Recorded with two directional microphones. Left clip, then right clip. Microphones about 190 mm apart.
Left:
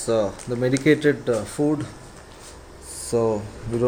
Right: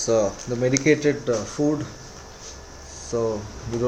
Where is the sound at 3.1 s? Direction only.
40° left (ahead or behind).